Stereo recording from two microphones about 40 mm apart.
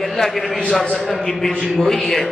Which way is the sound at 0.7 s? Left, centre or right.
Centre.